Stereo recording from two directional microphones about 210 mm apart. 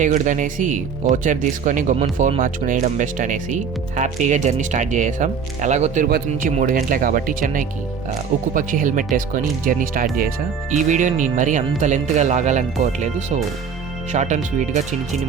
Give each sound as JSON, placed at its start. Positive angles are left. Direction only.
{"t": 0.0, "sound": "speech", "side_deg": -35}